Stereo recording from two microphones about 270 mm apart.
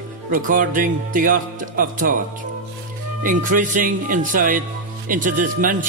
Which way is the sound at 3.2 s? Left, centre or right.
Right.